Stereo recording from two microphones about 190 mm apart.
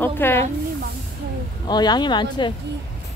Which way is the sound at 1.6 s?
20° left (ahead or behind).